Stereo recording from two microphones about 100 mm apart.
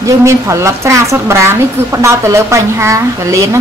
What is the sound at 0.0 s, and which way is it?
A woman's voice, 30° right (ahead or behind).